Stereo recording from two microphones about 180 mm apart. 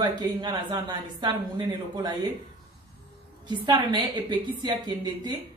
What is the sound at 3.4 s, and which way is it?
A woman's voice, 25° right (ahead or behind).